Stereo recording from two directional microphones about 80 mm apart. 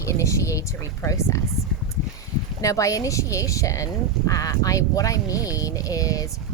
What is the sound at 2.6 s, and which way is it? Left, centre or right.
Speech, left.